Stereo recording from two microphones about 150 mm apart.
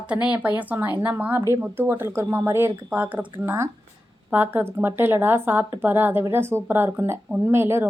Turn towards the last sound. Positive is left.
turn(degrees=-15)  # may be behind; listen again after turning